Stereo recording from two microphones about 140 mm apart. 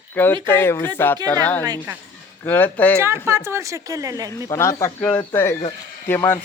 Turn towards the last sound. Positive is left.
turn(degrees=15)  # may be behind; listen again after turning